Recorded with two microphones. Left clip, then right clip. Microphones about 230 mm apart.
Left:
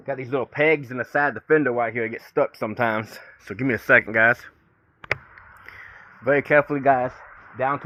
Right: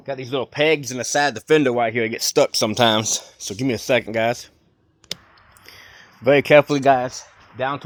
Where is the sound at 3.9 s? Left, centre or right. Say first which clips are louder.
Left 3 dB; right.